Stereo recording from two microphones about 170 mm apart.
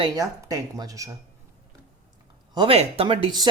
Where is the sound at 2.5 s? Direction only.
35° right (ahead or behind).